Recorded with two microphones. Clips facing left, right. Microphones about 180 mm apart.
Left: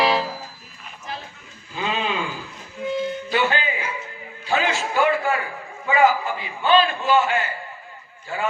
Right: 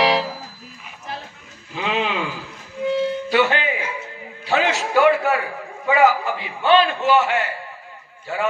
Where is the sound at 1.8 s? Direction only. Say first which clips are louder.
Right 2 dB; 75° right (ahead or behind).